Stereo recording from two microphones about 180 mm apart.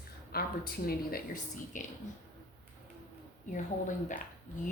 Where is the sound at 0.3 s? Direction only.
55° left (ahead or behind).